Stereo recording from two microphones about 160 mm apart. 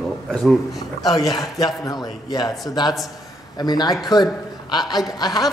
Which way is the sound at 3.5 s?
25° left (ahead or behind).